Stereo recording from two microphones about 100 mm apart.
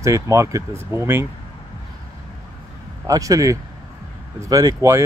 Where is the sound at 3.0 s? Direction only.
35° right (ahead or behind).